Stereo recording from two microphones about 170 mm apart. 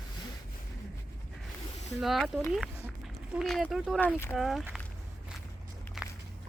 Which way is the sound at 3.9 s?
10° left (ahead or behind).